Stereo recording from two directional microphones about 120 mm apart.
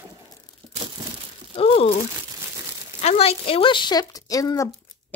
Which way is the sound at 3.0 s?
60° left (ahead or behind).